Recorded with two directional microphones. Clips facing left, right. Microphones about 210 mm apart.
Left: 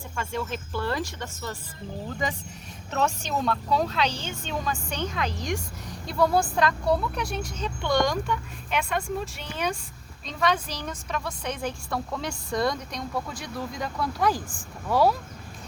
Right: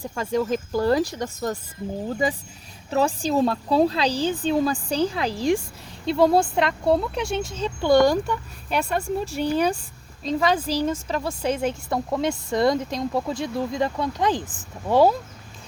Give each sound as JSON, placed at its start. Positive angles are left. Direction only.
{"t": 0.0, "sound": "a woman's voice", "side_deg": -35}
{"t": 2.9, "sound": "a woman's voice", "side_deg": -30}